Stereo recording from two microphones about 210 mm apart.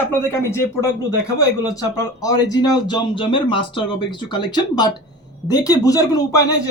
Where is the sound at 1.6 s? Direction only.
15° left (ahead or behind).